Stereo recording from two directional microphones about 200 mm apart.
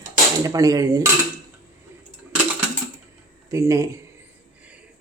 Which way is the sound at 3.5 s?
15° right (ahead or behind).